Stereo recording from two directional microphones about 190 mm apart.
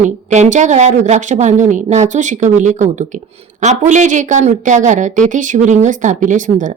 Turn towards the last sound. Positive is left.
turn(degrees=-40)  # may be behind; listen again after turning